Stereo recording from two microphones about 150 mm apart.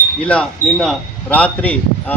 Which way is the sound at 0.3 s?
5° left (ahead or behind).